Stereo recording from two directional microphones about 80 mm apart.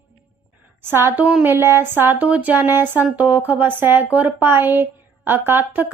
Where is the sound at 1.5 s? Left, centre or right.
Right.